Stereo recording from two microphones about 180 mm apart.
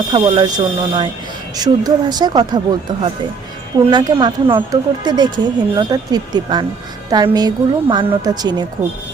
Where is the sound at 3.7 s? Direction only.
25° right (ahead or behind).